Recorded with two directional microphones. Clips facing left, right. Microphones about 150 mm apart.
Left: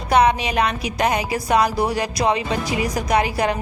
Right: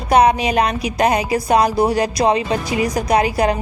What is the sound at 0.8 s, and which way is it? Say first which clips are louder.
A woman's voice: right 4 dB; 25° right (ahead or behind).